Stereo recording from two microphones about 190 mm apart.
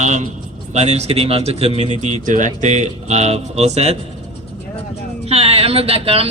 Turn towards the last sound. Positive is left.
turn(degrees=-30)  # may be behind; listen again after turning